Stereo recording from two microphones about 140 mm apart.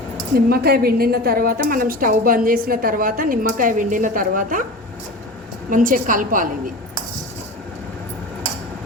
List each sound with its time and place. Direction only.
0.3 s a woman's voice: 90° right
5.7 s a woman's voice: 75° right (ahead or behind)